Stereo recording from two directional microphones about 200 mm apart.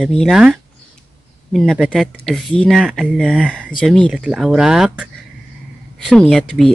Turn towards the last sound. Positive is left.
turn(degrees=5)  # may be behind; listen again after turning